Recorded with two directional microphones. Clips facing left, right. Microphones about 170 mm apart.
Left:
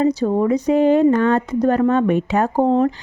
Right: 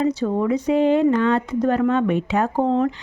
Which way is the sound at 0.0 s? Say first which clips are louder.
Left 3 dB; 40° left (ahead or behind).